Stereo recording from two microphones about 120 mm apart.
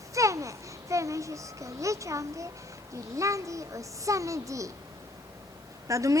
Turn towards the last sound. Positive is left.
turn(degrees=-25)  # may be behind; listen again after turning